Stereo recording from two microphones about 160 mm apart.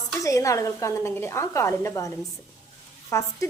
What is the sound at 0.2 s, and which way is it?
A woman's voice, 20° left (ahead or behind).